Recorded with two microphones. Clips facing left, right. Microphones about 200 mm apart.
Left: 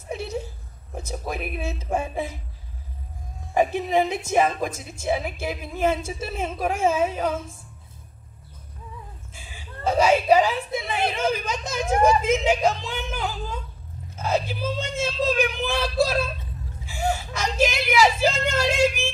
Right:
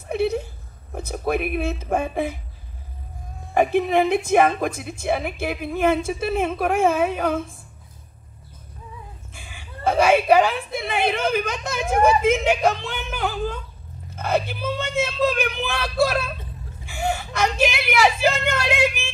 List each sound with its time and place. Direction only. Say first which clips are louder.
0.1 s a sound: right 8 dB; 60° right (ahead or behind)
0.9 s a woman's voice: right 7 dB; 60° right (ahead or behind)
3.5 s a woman's voice: right 3 dB; 60° right (ahead or behind)
9.3 s a woman's voice: right 1 dB; 60° right (ahead or behind)